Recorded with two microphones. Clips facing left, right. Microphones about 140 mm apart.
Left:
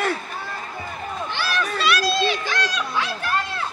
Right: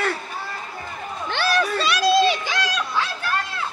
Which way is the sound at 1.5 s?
35° right (ahead or behind).